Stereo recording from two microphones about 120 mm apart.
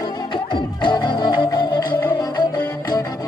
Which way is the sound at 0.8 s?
40° left (ahead or behind).